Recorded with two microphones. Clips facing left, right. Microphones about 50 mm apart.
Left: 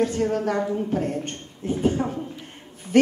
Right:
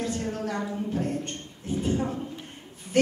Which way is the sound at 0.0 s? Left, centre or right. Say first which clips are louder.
Left 8 dB; left.